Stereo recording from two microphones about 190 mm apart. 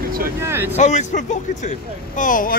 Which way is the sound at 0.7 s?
40° left (ahead or behind).